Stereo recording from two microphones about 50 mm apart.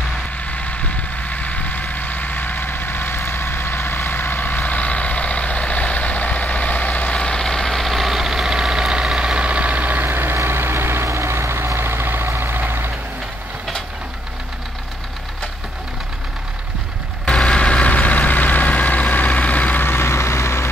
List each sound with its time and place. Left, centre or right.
0.5 s vehicle: left
7.2 s vehicle: centre; by 12.9 s right
17.2 s vehicle: centre; by 19.8 s left
19.8 s vehicle: left